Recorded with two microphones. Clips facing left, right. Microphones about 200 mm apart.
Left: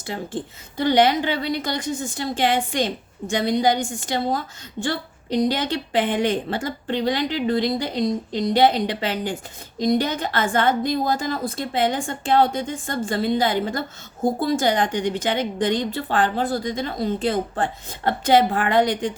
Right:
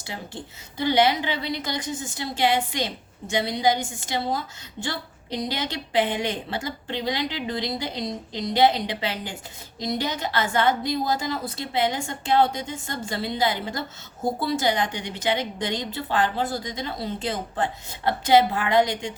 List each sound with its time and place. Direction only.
0.8 s a woman's voice: 50° left (ahead or behind)